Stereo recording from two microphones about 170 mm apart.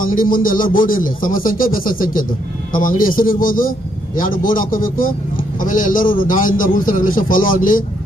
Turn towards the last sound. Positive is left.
turn(degrees=55)  # may be behind; listen again after turning